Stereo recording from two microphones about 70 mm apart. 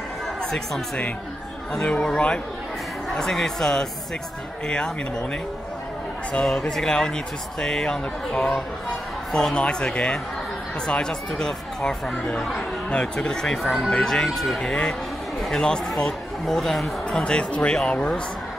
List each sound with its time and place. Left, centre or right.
1.7 s speech: centre
6.4 s speech: centre
17.2 s speech: centre